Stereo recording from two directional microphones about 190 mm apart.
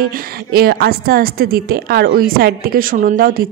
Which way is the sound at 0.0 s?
55° right (ahead or behind).